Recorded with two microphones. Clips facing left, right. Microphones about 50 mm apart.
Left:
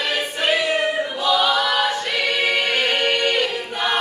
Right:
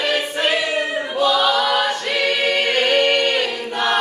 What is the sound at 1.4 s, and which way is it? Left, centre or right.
Choir, centre.